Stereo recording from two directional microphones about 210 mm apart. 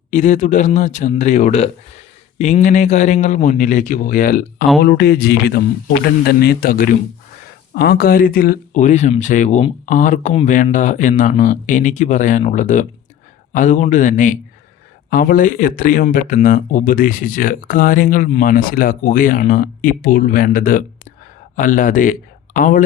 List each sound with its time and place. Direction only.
0.1 s speech: 35° left (ahead or behind)